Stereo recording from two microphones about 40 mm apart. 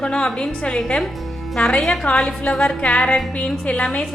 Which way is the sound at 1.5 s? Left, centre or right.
Left.